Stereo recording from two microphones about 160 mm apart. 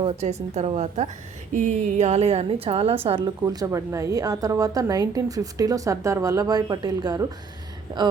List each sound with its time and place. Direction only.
0.0 s a woman's voice: 45° right (ahead or behind); by 7.3 s 25° right (ahead or behind)